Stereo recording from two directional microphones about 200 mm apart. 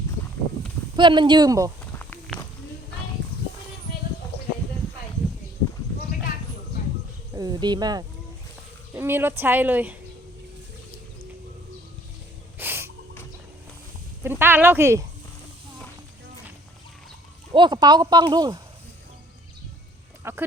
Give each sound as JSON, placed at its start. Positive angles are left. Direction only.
{"t": 0.9, "sound": "speech", "side_deg": -25}
{"t": 2.0, "sound": "walk", "side_deg": 5}
{"t": 7.3, "sound": "speech", "side_deg": -20}
{"t": 12.5, "sound": "a sound", "side_deg": -10}
{"t": 14.3, "sound": "speech", "side_deg": -10}
{"t": 17.5, "sound": "speech", "side_deg": -20}
{"t": 20.2, "sound": "speech", "side_deg": -10}